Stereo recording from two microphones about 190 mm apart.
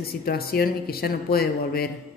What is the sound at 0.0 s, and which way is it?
Speech, 55° left (ahead or behind).